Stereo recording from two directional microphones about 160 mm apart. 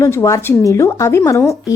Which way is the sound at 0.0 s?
20° left (ahead or behind).